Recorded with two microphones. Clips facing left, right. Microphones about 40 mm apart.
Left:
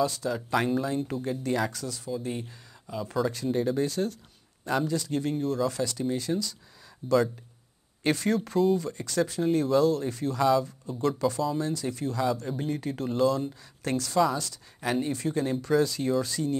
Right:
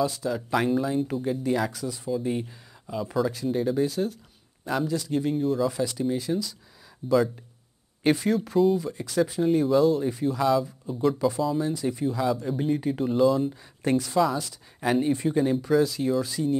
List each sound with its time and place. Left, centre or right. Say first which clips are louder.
0.0 s speech: right 1 dB; centre